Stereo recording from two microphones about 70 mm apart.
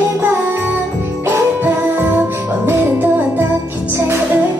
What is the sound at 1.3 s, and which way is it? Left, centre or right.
Music, right.